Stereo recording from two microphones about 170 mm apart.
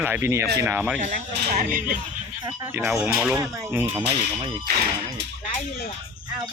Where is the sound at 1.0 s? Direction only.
50° right (ahead or behind).